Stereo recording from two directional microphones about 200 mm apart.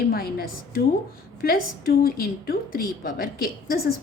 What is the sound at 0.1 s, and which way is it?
A woman's voice, 50° left (ahead or behind).